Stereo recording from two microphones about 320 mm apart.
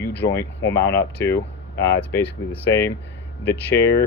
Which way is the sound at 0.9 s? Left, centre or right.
Centre.